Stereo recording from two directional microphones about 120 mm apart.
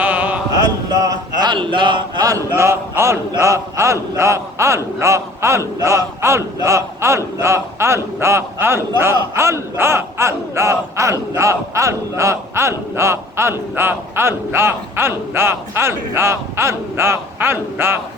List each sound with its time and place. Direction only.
0.0 s chant: 15° right (ahead or behind)
1.4 s a man's voice: 40° right (ahead or behind)
2.2 s battle cry: 25° right (ahead or behind)